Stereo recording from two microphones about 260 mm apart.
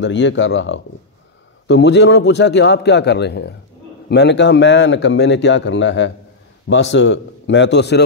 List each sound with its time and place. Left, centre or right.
0.0 s speech: left